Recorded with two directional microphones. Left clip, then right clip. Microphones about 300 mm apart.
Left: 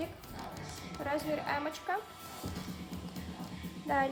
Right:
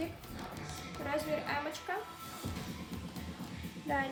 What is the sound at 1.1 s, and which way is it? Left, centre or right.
Speech, centre.